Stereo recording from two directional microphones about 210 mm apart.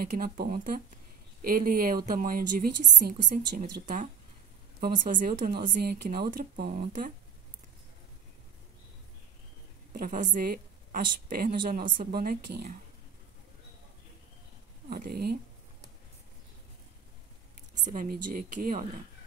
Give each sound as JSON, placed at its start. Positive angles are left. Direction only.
{"t": 0.0, "sound": "a woman's voice", "side_deg": -45}
{"t": 9.9, "sound": "a woman's voice", "side_deg": -40}
{"t": 14.9, "sound": "speech", "side_deg": -45}
{"t": 17.9, "sound": "a woman's voice", "side_deg": -45}